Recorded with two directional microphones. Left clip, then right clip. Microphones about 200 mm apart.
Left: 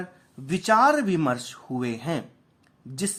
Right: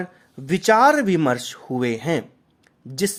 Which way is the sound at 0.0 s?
40° right (ahead or behind).